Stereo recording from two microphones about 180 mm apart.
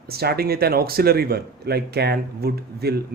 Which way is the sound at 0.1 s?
60° right (ahead or behind).